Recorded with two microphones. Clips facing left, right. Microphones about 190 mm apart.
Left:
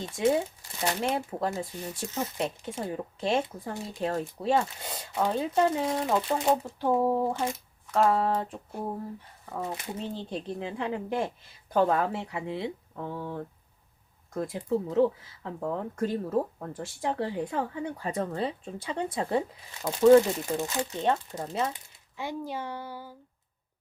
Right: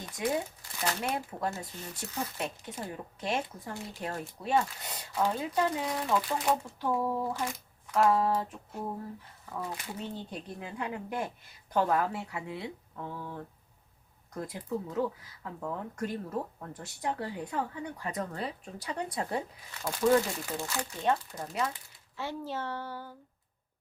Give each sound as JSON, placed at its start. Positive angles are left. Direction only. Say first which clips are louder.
{"t": 0.0, "sound": "speech", "louder": "left 6 dB", "side_deg": 25}
{"t": 9.5, "sound": "speech", "louder": "left 4 dB", "side_deg": 25}